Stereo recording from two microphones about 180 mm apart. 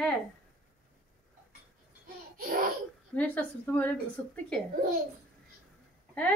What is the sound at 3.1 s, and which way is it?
Speech, 10° left (ahead or behind).